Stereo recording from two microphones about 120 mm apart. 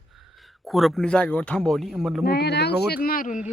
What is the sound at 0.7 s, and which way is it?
Speech, centre (ahead or behind).